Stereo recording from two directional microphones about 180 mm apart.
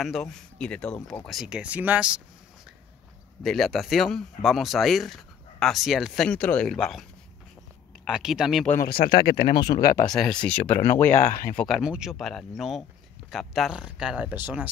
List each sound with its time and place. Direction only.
0.0 s speech: centre (ahead or behind)
3.4 s speech: centre (ahead or behind)
8.6 s speech: 50° left (ahead or behind)
10.1 s speech: 5° left (ahead or behind)